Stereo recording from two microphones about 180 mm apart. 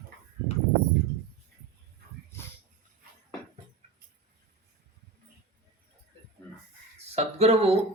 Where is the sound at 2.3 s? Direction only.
15° left (ahead or behind).